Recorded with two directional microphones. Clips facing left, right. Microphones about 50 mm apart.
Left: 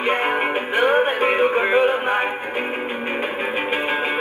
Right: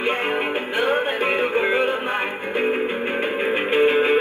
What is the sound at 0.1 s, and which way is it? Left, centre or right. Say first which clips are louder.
Music: left 2 dB; left.